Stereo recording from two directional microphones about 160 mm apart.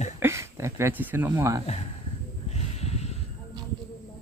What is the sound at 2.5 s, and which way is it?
Snort, 40° left (ahead or behind).